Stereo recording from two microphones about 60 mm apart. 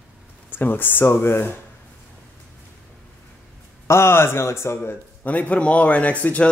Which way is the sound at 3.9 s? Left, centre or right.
Left.